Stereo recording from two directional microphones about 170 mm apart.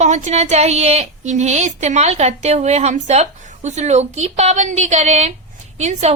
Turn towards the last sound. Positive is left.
turn(degrees=-40)  # may be behind; listen again after turning